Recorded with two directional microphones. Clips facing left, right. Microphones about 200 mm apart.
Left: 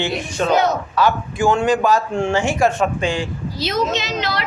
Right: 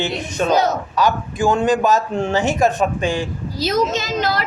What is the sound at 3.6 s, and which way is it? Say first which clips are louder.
Speech: right 2 dB; 45° right (ahead or behind).